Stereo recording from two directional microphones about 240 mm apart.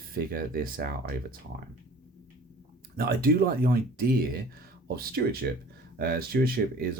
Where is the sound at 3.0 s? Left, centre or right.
Right.